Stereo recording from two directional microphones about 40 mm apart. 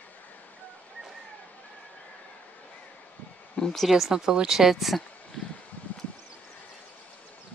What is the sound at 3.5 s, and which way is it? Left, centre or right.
Speech, centre.